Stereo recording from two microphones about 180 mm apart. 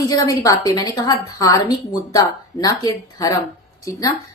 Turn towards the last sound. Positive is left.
turn(degrees=20)  # may be behind; listen again after turning